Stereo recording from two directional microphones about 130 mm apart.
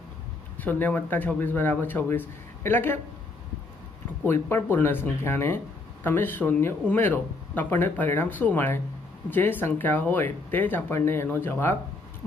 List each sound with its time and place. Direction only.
0.6 s speech: 15° left (ahead or behind)
4.3 s speech: 15° left (ahead or behind)